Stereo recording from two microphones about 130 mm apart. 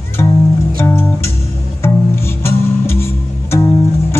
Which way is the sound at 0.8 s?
20° left (ahead or behind).